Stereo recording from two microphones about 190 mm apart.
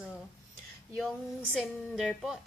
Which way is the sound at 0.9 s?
Centre (ahead or behind).